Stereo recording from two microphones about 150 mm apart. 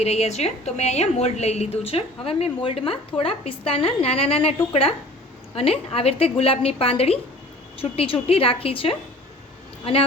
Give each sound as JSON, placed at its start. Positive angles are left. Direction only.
{"t": 0.0, "sound": "a woman's voice", "side_deg": 45}